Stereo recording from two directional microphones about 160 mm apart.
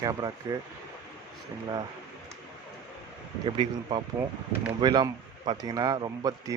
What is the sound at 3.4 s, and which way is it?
Speech, 30° right (ahead or behind).